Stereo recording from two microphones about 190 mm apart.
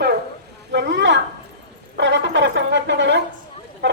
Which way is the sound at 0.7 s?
65° right (ahead or behind).